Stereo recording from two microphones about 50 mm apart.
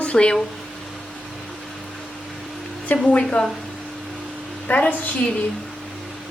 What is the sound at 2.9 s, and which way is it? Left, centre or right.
Speech, left.